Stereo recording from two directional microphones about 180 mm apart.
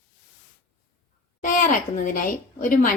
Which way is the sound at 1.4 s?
45° left (ahead or behind).